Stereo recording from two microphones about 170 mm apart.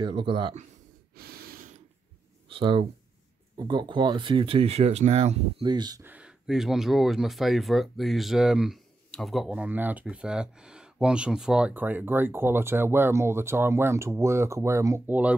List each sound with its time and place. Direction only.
0.0 s speech: 30° right (ahead or behind)
1.1 s gasp: 65° right (ahead or behind)
2.5 s speech: 30° right (ahead or behind)
5.7 s speech: 25° right (ahead or behind)
6.0 s speech: 5° right (ahead or behind)